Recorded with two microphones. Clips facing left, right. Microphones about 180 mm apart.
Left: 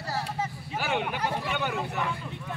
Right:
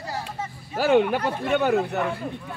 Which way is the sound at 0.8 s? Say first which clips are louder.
Right 10 dB; 55° right (ahead or behind).